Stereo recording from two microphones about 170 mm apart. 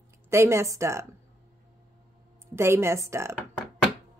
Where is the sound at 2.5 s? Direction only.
15° right (ahead or behind).